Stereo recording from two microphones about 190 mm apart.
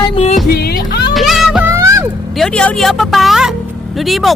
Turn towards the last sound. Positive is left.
turn(degrees=0)  # may be behind; listen again after turning